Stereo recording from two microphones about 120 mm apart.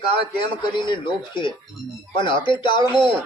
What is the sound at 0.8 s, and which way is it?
Speech, 40° left (ahead or behind).